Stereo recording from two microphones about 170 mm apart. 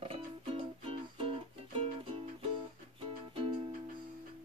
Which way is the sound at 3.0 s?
30° right (ahead or behind).